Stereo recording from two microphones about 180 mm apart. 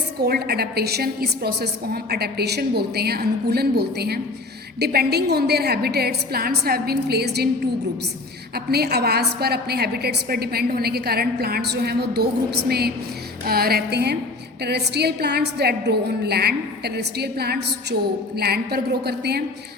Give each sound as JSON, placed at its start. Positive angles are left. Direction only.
{"t": 0.2, "sound": "a woman's voice", "side_deg": -60}
{"t": 8.5, "sound": "a woman's voice", "side_deg": -60}